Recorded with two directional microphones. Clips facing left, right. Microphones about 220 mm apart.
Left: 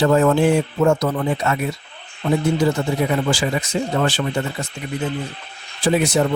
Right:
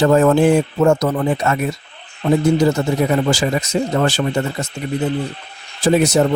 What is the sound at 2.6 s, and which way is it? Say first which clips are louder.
Speech: right 3 dB; 40° right (ahead or behind).